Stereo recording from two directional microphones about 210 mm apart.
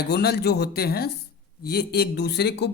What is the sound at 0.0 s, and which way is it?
Speech, 50° left (ahead or behind).